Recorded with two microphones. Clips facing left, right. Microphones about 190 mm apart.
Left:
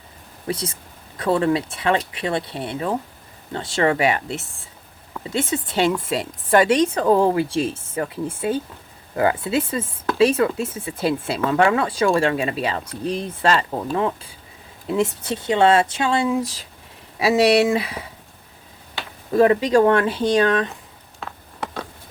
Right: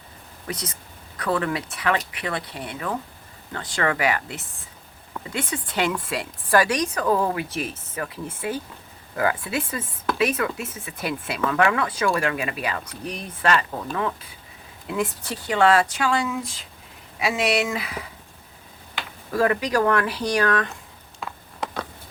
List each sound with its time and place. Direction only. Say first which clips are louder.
0.4 s speech: left 6 dB; 30° left (ahead or behind)
17.2 s speech: left 7 dB; 35° left (ahead or behind)
19.3 s speech: left 6 dB; 25° left (ahead or behind)